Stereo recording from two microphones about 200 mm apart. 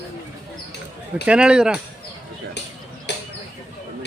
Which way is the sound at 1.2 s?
5° right (ahead or behind).